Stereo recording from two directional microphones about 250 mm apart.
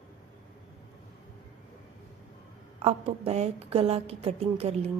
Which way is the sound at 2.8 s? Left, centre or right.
Right.